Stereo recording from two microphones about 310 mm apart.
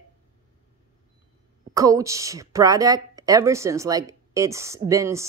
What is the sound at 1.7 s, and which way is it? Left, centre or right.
A woman's voice, centre.